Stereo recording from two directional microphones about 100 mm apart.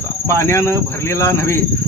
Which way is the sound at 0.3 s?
25° left (ahead or behind).